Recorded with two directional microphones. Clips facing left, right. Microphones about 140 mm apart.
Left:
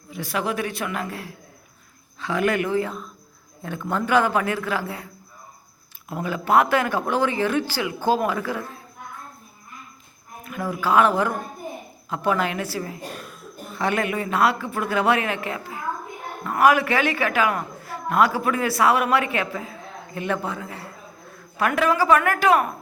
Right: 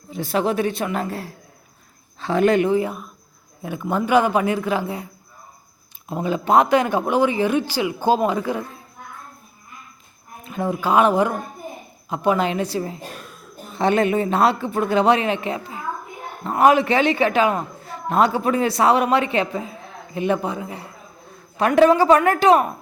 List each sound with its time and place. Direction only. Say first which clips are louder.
0.1 s a woman's voice: right 5 dB; 25° right (ahead or behind)
6.1 s a woman's voice: right 3 dB; 20° right (ahead or behind)
10.4 s a woman's voice: right 3 dB; 25° right (ahead or behind)